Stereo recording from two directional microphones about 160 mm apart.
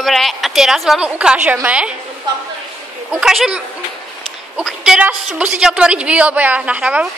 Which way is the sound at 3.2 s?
5° right (ahead or behind).